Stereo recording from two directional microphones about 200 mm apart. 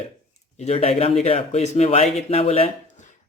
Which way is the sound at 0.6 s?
30° left (ahead or behind).